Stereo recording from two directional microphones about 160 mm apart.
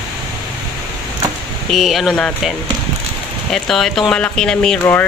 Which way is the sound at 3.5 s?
Centre (ahead or behind).